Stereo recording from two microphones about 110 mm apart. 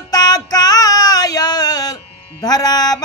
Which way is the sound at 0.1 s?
35° left (ahead or behind).